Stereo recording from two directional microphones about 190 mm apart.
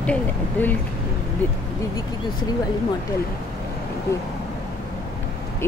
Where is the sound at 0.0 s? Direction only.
10° left (ahead or behind).